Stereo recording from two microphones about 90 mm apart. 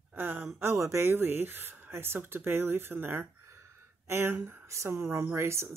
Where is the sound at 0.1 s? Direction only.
25° right (ahead or behind).